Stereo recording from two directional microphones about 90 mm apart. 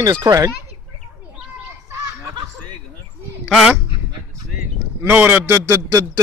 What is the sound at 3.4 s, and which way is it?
Speech, 5° right (ahead or behind).